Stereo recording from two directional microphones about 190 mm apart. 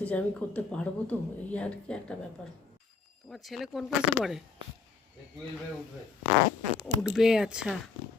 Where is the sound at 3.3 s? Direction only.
Centre (ahead or behind).